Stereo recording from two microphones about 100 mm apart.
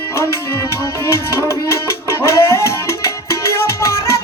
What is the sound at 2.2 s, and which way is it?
Music, 25° left (ahead or behind).